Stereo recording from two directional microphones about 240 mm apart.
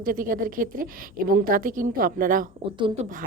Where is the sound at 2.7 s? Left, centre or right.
Centre.